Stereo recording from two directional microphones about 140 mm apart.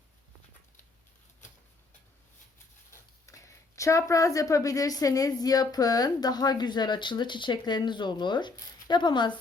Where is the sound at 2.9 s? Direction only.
20° left (ahead or behind).